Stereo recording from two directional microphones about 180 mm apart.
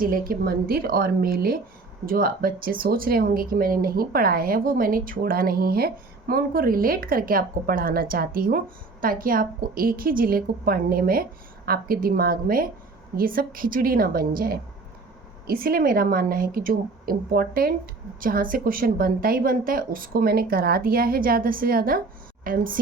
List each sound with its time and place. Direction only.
0.0 s speech: 55° right (ahead or behind)